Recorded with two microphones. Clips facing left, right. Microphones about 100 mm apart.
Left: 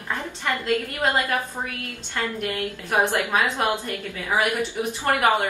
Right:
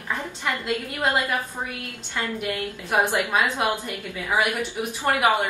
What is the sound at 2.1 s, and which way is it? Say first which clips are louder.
A woman's voice: even; 10° right (ahead or behind).